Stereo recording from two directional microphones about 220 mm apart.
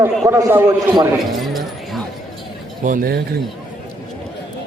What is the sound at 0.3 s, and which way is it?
Speech, 15° right (ahead or behind).